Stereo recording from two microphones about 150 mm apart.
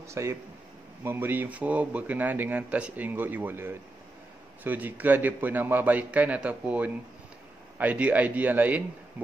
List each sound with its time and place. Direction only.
0.0 s speech: 20° right (ahead or behind)